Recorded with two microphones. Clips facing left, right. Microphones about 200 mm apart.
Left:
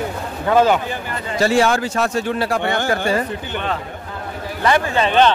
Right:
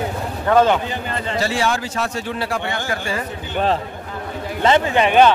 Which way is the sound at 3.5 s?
30° right (ahead or behind).